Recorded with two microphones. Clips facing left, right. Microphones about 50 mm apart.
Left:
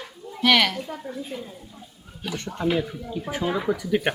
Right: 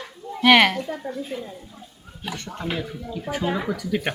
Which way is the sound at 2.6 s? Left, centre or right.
Centre.